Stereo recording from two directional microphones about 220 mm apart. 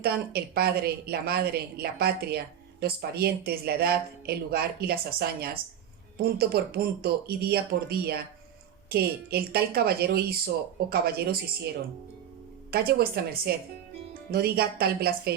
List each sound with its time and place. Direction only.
0.0 s speech: 45° right (ahead or behind)
12.7 s speech: 45° right (ahead or behind)